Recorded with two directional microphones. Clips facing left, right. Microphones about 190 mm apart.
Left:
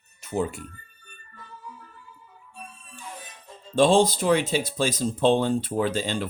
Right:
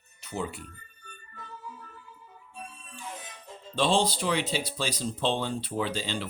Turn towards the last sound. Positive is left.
turn(degrees=50)  # may be behind; listen again after turning